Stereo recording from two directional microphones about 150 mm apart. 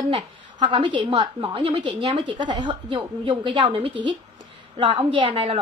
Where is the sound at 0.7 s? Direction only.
30° right (ahead or behind).